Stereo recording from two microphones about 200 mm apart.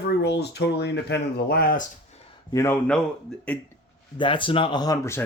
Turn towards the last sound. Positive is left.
turn(degrees=15)  # may be behind; listen again after turning